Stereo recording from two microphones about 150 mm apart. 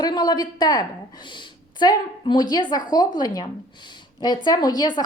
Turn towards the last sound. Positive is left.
turn(degrees=25)  # may be behind; listen again after turning